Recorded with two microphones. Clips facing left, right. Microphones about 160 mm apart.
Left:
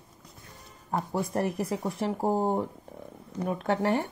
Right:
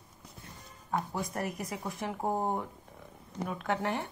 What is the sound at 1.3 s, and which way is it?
Speech, 30° left (ahead or behind).